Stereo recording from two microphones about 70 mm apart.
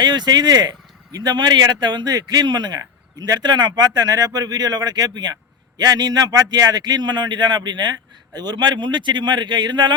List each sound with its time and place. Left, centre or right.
0.0 s a man's voice: right